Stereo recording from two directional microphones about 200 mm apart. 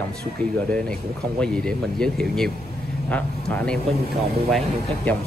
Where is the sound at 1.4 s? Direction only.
5° left (ahead or behind).